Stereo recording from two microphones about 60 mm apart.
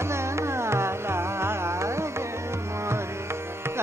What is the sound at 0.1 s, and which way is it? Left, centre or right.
Carnatic music, right.